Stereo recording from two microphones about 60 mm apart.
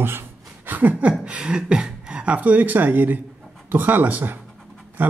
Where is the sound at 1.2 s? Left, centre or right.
Centre.